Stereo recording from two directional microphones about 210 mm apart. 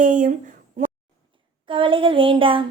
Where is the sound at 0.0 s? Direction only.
40° right (ahead or behind).